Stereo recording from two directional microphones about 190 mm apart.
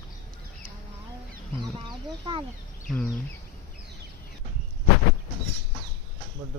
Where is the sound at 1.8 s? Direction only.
25° right (ahead or behind).